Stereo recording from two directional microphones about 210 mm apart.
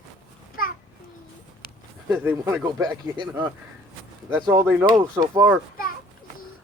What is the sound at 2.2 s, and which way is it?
Speech, 10° right (ahead or behind).